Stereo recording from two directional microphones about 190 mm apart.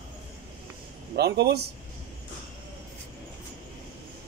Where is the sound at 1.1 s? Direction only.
60° right (ahead or behind).